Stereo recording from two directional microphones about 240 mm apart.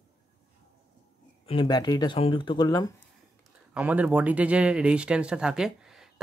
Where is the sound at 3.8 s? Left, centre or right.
Centre.